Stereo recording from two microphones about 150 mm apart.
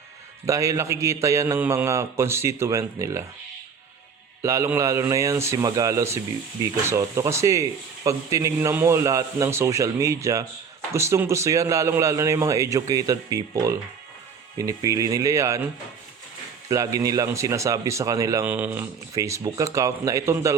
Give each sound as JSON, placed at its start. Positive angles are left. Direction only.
{"t": 0.4, "sound": "speech", "side_deg": -20}
{"t": 4.4, "sound": "speech", "side_deg": -20}
{"t": 16.6, "sound": "speech", "side_deg": -20}